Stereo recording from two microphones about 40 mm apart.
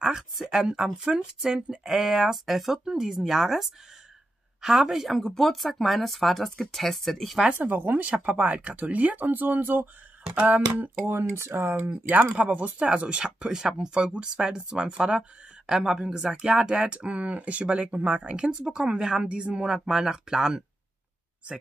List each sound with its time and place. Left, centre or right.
0.0 s a woman's voice: centre
5.2 s speech: centre
7.5 s speech: right
10.4 s speech: right
11.1 s speech: right
11.9 s speech: right
12.3 s speech: right
13.2 s speech: centre